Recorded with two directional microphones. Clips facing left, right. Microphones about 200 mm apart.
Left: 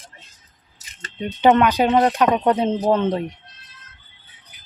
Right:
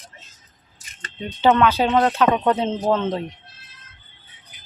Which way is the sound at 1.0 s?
15° left (ahead or behind).